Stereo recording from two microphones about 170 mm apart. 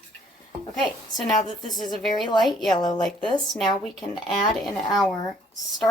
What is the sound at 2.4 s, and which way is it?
Speech, centre (ahead or behind).